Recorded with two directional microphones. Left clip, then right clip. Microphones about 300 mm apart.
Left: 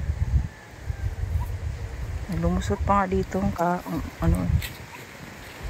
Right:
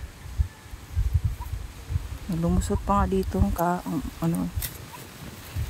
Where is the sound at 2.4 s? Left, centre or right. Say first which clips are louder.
Left 2 dB; centre.